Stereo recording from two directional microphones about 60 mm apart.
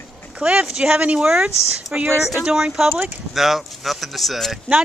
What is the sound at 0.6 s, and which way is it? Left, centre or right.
Speech, centre.